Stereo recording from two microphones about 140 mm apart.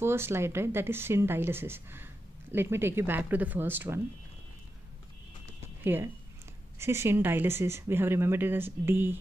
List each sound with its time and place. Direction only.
0.0 s speech: 15° right (ahead or behind)
5.9 s speech: 15° right (ahead or behind)